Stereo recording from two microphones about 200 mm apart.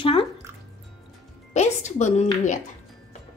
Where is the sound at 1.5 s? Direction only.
35° left (ahead or behind).